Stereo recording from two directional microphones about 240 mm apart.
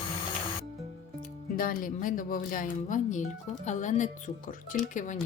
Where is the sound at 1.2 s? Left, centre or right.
Left.